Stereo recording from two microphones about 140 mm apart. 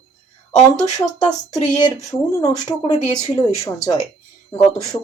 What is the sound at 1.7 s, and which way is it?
Speech, 25° left (ahead or behind).